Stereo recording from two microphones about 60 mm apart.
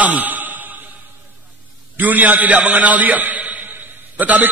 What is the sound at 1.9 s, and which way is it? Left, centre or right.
A man's voice, right.